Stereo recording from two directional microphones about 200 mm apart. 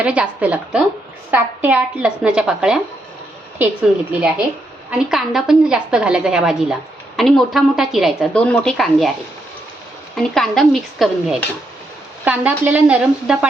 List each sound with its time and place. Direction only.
0.0 s a woman's voice: 5° right (ahead or behind)
4.1 s a woman's voice: 5° right (ahead or behind)
10.2 s a woman's voice: centre (ahead or behind)